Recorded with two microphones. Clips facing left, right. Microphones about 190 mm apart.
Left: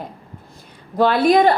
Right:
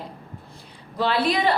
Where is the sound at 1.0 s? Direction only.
45° left (ahead or behind).